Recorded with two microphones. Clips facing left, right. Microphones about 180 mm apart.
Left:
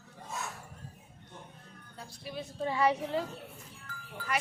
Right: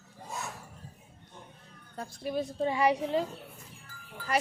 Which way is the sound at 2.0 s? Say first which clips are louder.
Right 9 dB; 50° right (ahead or behind).